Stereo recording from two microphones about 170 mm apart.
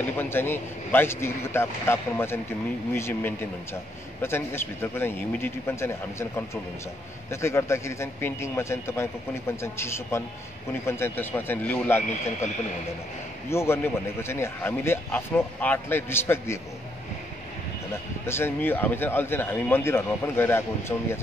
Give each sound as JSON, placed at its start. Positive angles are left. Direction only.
{"t": 0.2, "sound": "a man's voice", "side_deg": 10}
{"t": 13.5, "sound": "a man's voice", "side_deg": 15}
{"t": 18.2, "sound": "a man's voice", "side_deg": 15}